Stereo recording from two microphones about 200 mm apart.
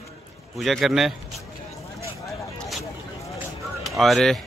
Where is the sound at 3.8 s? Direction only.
Centre (ahead or behind).